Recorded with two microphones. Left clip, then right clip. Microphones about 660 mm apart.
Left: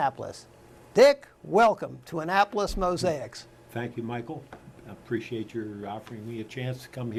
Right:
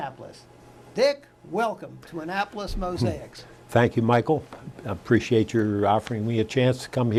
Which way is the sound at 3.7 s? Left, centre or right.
Right.